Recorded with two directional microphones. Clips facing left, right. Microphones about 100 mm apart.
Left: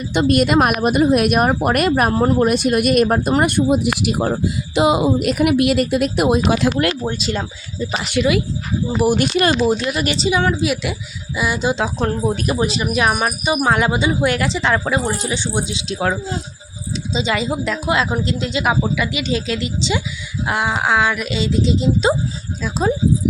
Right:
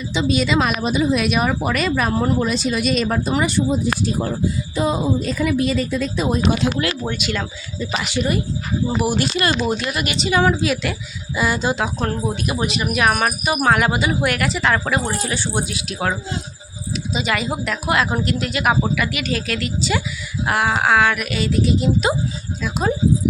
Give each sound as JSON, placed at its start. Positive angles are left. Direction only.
{"t": 0.1, "sound": "a woman's voice", "side_deg": 55}
{"t": 7.1, "sound": "speech", "side_deg": 30}
{"t": 8.1, "sound": "speech", "side_deg": 90}
{"t": 9.0, "sound": "speech", "side_deg": 45}
{"t": 10.6, "sound": "speech", "side_deg": 5}
{"t": 11.8, "sound": "speech", "side_deg": 25}
{"t": 15.2, "sound": "speech", "side_deg": 20}